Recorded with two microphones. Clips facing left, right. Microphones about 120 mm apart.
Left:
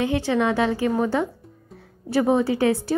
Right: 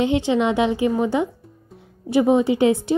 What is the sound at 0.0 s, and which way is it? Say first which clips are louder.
Speech: right 3 dB; 20° right (ahead or behind).